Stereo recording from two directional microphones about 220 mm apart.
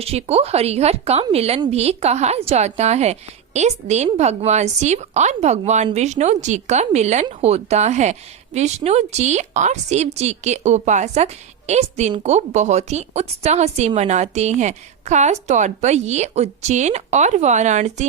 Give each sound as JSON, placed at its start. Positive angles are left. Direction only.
{"t": 0.0, "sound": "a woman's voice", "side_deg": -30}